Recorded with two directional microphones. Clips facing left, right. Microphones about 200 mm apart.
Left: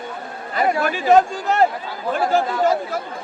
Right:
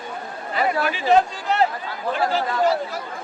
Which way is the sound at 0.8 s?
45° left (ahead or behind).